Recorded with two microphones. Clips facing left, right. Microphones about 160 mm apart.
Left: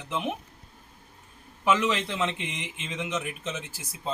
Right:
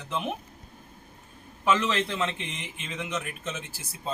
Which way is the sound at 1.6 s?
15° left (ahead or behind).